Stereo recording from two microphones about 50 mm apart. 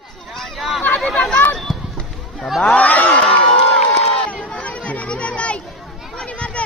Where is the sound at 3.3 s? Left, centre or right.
Left.